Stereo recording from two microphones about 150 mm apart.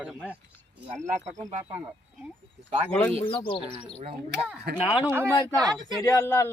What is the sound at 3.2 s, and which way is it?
Speech, 35° left (ahead or behind).